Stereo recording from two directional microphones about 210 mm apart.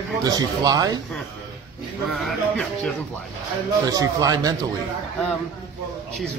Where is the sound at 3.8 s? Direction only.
15° right (ahead or behind).